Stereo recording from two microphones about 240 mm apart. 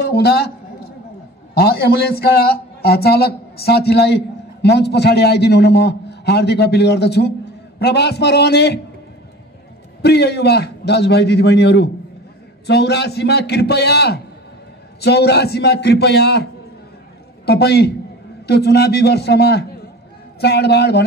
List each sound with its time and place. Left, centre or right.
0.0 s a man's voice: left
1.5 s a man's voice: left
10.0 s a man's voice: left
17.5 s a man's voice: left